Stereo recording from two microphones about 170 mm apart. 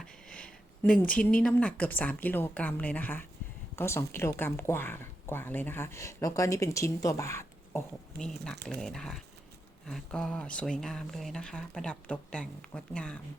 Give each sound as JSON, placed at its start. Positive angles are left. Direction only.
{"t": 0.0, "sound": "speech", "side_deg": 5}
{"t": 8.2, "sound": "speech", "side_deg": 5}